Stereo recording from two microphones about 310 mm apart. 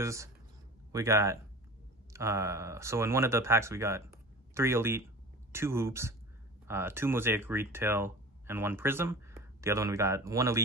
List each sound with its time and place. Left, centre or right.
0.0 s speech: centre